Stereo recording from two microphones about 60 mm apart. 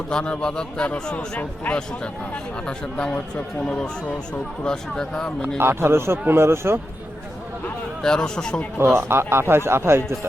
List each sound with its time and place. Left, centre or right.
0.1 s speech: centre
2.0 s speech: centre
5.5 s speech: right
8.0 s speech: centre
8.8 s speech: right